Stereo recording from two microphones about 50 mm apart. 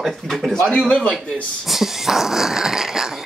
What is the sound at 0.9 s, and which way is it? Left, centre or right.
Speech, left.